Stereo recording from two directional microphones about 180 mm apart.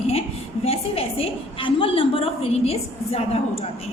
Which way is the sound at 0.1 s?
35° left (ahead or behind).